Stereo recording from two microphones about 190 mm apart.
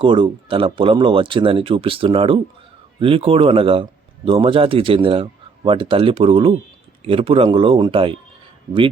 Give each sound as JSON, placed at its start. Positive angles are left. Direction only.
{"t": 0.0, "sound": "speech", "side_deg": -25}